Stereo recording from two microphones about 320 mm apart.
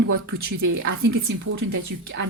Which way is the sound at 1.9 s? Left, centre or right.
Right.